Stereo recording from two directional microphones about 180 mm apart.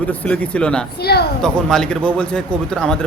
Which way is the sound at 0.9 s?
60° left (ahead or behind).